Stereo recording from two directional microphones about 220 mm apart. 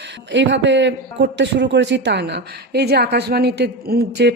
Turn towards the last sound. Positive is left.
turn(degrees=-50)  # may be behind; listen again after turning